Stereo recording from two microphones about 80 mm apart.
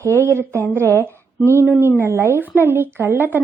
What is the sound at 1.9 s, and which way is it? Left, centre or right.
A woman's voice, right.